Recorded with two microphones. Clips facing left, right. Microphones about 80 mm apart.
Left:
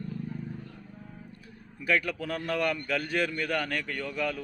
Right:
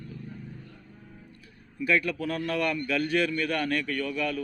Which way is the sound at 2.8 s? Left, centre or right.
Left.